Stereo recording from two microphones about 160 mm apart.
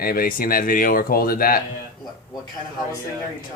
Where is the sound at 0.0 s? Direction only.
65° left (ahead or behind).